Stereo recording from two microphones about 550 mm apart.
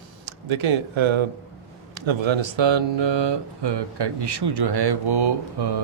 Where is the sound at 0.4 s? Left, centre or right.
Right.